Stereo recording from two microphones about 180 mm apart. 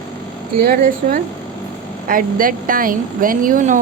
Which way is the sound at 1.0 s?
45° right (ahead or behind).